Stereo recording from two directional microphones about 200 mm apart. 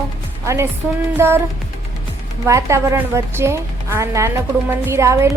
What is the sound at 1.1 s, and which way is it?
Speech, 10° right (ahead or behind).